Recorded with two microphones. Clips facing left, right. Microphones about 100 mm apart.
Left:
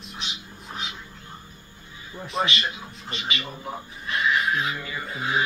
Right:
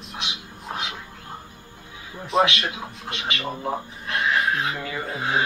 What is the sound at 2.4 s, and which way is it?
Speech, 65° right (ahead or behind).